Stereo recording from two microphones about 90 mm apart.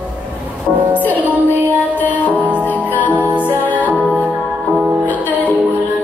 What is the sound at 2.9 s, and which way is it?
Music, 20° left (ahead or behind).